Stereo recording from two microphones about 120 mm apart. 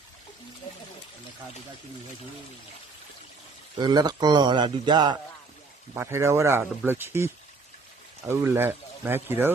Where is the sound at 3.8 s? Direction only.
35° right (ahead or behind).